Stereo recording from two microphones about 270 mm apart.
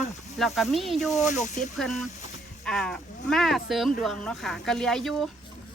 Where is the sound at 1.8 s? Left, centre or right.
Centre.